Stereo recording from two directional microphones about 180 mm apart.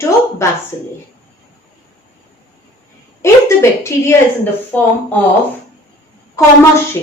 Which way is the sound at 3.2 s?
15° left (ahead or behind).